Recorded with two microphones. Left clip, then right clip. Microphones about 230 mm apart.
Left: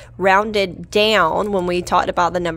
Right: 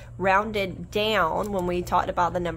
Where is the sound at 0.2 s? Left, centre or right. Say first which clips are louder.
Left 7 dB; left.